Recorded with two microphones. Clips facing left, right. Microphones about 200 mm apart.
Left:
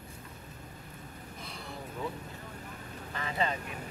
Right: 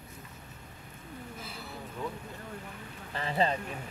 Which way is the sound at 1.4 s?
5° right (ahead or behind).